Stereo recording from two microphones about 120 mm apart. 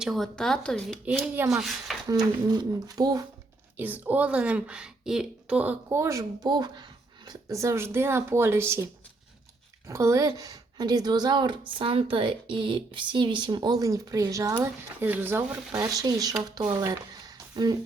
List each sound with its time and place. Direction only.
0.0 s speech: centre (ahead or behind)
2.0 s speech: 35° right (ahead or behind)
3.8 s speech: 15° right (ahead or behind); by 16.9 s 35° right (ahead or behind)
16.9 s a sound: 30° right (ahead or behind)